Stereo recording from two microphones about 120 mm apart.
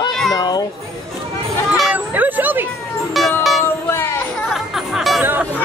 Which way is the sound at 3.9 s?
20° left (ahead or behind).